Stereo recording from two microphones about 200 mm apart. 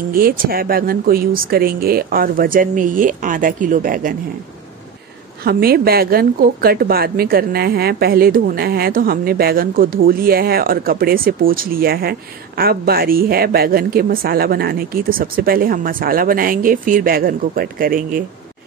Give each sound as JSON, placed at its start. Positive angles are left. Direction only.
{"t": 0.1, "sound": "a woman's voice", "side_deg": -45}
{"t": 5.4, "sound": "a woman's voice", "side_deg": -50}